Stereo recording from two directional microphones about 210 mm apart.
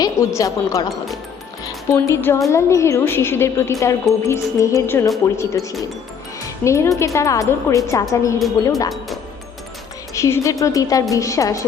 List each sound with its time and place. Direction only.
0.0 s a woman's voice: 15° left (ahead or behind)
1.9 s a woman's voice: 15° left (ahead or behind)
6.7 s a woman's voice: 15° left (ahead or behind)
10.2 s a woman's voice: 15° left (ahead or behind)